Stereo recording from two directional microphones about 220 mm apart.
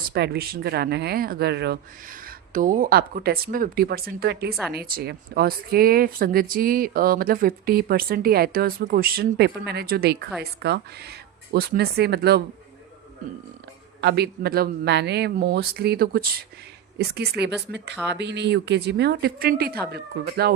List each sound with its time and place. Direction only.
0.1 s speech: 45° right (ahead or behind)
14.0 s speech: 50° right (ahead or behind)